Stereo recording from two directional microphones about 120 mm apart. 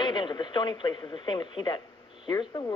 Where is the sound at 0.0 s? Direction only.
40° left (ahead or behind).